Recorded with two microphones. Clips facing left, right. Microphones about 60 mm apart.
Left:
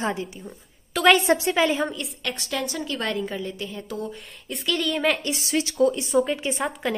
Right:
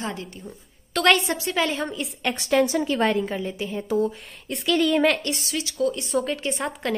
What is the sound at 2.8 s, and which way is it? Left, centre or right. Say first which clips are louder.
A woman's voice: right 5 dB; right.